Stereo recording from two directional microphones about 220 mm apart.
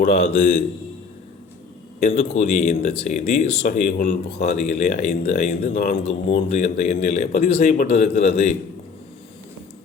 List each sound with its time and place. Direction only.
0.3 s speech: 30° left (ahead or behind)
2.0 s speech: 30° left (ahead or behind)